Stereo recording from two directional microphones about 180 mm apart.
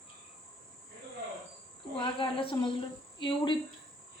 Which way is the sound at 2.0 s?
30° left (ahead or behind).